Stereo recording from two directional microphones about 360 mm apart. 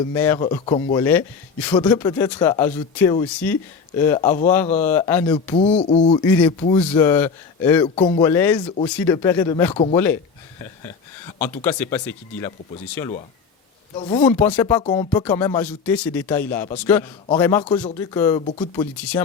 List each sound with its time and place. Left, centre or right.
0.1 s speech: centre
14.3 s speech: centre